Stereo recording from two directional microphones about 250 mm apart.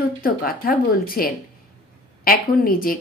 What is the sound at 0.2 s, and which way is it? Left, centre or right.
A woman's voice, left.